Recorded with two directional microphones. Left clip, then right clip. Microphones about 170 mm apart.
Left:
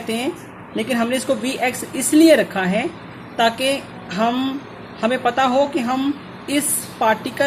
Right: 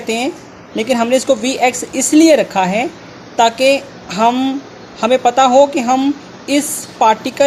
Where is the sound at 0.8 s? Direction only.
20° right (ahead or behind).